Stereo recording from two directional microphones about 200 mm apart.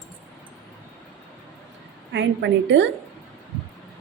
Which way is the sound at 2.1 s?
65° right (ahead or behind).